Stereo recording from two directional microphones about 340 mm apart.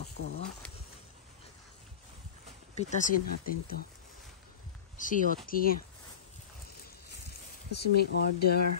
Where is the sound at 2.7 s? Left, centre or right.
Left.